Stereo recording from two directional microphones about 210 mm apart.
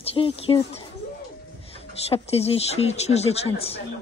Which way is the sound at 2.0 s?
30° left (ahead or behind).